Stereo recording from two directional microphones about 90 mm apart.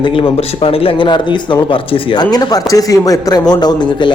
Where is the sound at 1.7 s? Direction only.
50° left (ahead or behind).